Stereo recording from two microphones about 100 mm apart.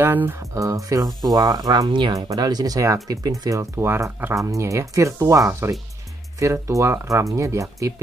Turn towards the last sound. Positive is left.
turn(degrees=-30)  # may be behind; listen again after turning